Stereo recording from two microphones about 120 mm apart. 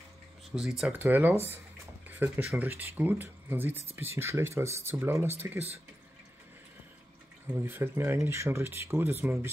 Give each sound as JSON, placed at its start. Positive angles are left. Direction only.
{"t": 0.5, "sound": "speech", "side_deg": -5}
{"t": 0.9, "sound": "speech", "side_deg": -15}
{"t": 7.4, "sound": "speech", "side_deg": -15}
{"t": 9.2, "sound": "speech", "side_deg": -10}